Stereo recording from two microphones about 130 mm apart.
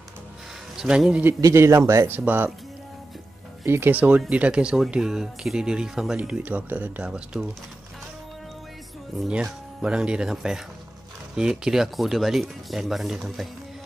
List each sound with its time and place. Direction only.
0.7 s speech: 5° right (ahead or behind)
1.4 s speech: 20° right (ahead or behind)
3.6 s speech: 15° right (ahead or behind)
9.2 s speech: 5° right (ahead or behind)